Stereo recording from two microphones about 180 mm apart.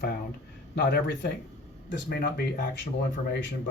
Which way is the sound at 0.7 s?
70° left (ahead or behind).